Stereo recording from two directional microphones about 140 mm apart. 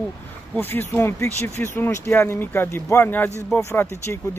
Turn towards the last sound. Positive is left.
turn(degrees=20)  # may be behind; listen again after turning